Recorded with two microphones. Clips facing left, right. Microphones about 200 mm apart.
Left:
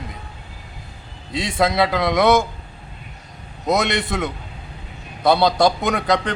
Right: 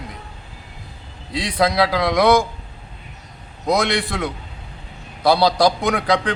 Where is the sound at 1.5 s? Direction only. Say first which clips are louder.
Right 1 dB; centre (ahead or behind).